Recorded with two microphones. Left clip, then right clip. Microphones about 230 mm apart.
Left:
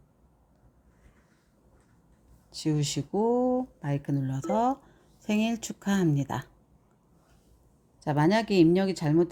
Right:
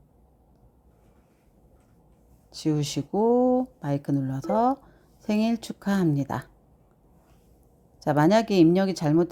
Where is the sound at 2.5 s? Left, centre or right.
Centre.